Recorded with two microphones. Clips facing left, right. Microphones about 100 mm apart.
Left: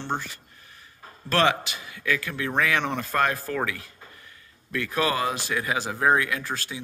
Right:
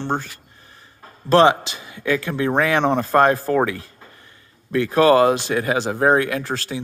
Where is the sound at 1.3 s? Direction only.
25° right (ahead or behind).